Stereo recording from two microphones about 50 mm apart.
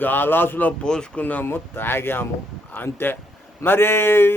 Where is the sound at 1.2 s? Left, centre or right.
Left.